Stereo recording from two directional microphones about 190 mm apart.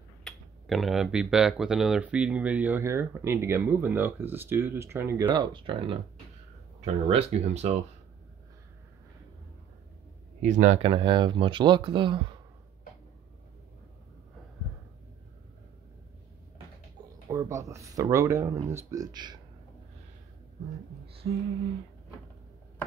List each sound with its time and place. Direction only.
0.2 s speech: centre (ahead or behind); by 7.7 s 35° right (ahead or behind)
10.4 s speech: 40° right (ahead or behind)
17.3 s speech: 15° right (ahead or behind)
21.2 s a sound: 50° right (ahead or behind)